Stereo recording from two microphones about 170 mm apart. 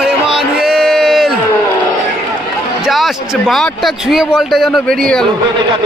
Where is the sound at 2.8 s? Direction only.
Centre (ahead or behind).